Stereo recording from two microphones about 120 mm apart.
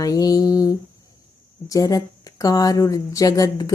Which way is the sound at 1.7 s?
30° left (ahead or behind).